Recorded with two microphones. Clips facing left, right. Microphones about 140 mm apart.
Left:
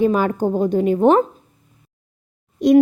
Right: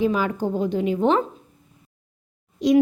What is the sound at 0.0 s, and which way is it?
Speech, 50° left (ahead or behind).